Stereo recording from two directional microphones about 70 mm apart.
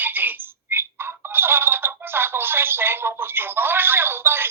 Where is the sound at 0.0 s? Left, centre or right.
Right.